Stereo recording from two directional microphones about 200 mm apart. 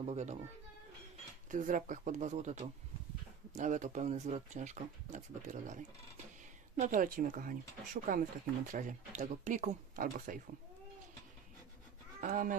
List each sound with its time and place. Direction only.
0.0 s speech: 35° right (ahead or behind)
1.5 s speech: 40° right (ahead or behind)
12.2 s speech: 40° right (ahead or behind)